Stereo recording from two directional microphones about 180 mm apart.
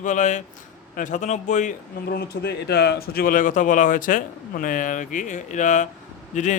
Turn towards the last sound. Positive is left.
turn(degrees=40)  # may be behind; listen again after turning